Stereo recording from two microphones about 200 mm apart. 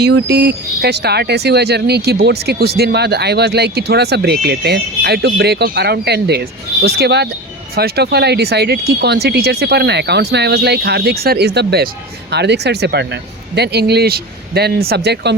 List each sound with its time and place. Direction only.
0.0 s speech: 60° right (ahead or behind)